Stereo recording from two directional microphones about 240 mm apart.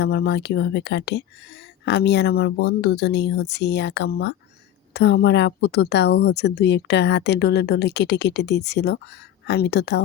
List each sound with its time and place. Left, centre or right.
0.0 s speech: left